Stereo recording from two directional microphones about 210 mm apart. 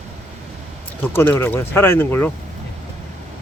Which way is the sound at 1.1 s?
10° left (ahead or behind).